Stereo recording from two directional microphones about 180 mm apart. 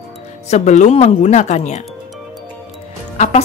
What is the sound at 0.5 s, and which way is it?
Speech, 40° left (ahead or behind).